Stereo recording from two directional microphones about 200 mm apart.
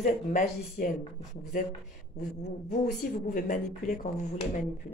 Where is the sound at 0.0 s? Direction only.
40° left (ahead or behind).